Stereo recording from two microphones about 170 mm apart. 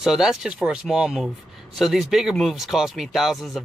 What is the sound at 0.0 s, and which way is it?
Speech, 5° right (ahead or behind).